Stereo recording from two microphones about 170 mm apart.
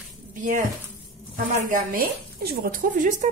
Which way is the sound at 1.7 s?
55° right (ahead or behind).